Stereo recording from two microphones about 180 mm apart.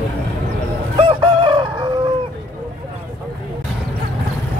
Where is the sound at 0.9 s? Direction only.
30° right (ahead or behind).